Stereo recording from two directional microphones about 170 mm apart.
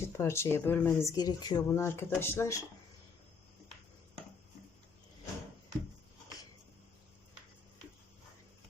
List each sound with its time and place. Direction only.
0.2 s speech: 15° left (ahead or behind)